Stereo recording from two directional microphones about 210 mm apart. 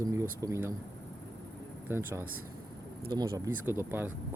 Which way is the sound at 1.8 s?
10° right (ahead or behind).